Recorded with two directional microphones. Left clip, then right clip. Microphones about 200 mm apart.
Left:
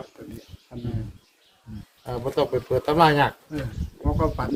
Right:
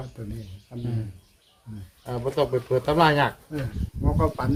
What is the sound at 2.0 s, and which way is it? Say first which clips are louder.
Speech: left 1 dB; 45° left (ahead or behind).